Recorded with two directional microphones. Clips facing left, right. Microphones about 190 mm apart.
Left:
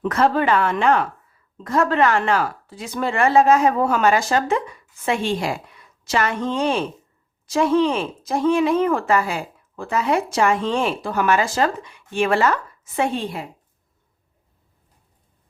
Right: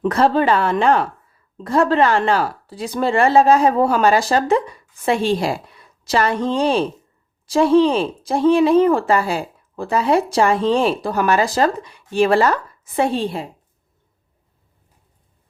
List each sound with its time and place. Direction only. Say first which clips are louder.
0.0 s speech: right 3 dB; 30° right (ahead or behind)